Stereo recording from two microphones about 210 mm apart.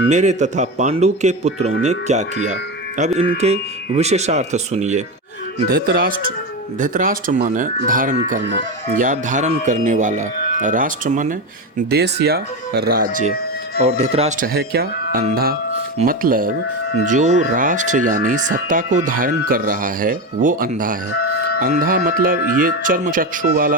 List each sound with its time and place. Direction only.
0.0 s speech: 35° right (ahead or behind)
5.6 s speech: 45° right (ahead or behind)
11.9 s speech: 50° right (ahead or behind)
13.8 s speech: 30° right (ahead or behind)